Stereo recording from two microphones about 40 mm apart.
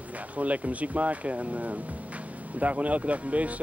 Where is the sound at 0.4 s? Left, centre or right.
Right.